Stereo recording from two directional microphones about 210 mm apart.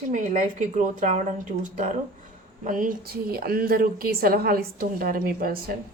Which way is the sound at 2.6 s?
40° right (ahead or behind).